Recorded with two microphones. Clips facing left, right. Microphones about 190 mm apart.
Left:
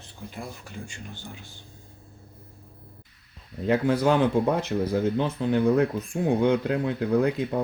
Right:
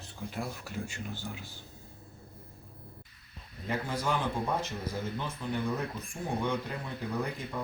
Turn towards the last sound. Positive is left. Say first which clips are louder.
# left 12 dB
turn(degrees=70)  # may be behind; listen again after turning